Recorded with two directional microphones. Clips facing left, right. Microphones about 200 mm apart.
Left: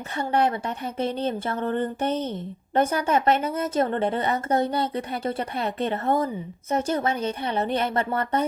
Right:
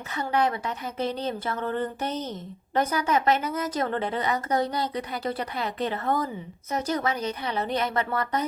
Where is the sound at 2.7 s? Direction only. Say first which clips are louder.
Left 3 dB; 25° left (ahead or behind).